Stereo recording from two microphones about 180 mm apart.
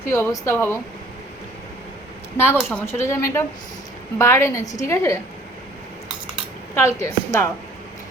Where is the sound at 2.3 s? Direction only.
10° left (ahead or behind).